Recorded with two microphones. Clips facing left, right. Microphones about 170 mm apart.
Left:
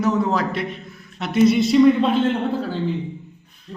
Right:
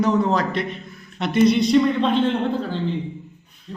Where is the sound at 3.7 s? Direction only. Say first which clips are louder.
Right 1 dB; centre (ahead or behind).